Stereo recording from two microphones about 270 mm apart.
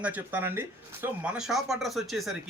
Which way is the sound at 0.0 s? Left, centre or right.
Centre.